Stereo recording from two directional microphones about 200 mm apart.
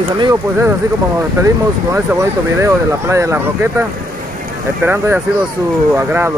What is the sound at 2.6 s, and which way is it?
Speech, 15° right (ahead or behind).